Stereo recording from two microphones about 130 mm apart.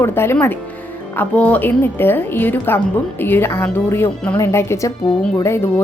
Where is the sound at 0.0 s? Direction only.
20° left (ahead or behind).